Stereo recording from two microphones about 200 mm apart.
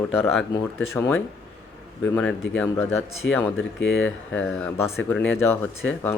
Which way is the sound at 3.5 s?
70° left (ahead or behind).